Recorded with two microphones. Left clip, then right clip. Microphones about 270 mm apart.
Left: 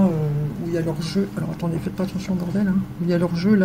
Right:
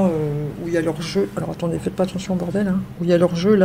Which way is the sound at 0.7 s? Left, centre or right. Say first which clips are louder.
Right 5 dB; right.